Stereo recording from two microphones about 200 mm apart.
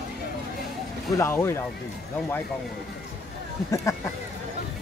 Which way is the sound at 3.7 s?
15° left (ahead or behind).